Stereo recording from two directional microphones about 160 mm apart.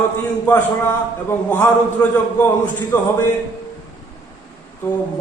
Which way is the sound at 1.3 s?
15° left (ahead or behind).